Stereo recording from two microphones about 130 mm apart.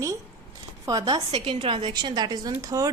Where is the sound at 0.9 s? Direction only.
30° right (ahead or behind).